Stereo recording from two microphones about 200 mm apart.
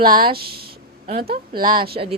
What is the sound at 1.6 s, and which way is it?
Speech, 20° right (ahead or behind).